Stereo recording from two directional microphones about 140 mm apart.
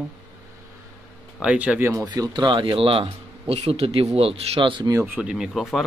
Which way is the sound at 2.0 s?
30° right (ahead or behind).